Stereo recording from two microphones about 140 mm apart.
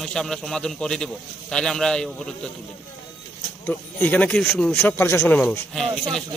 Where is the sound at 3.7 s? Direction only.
15° left (ahead or behind).